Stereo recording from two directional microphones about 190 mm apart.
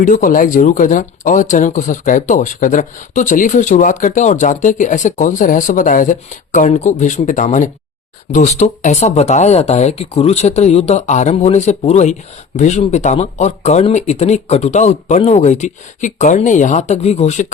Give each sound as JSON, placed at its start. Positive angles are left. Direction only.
{"t": 0.0, "sound": "speech", "side_deg": 45}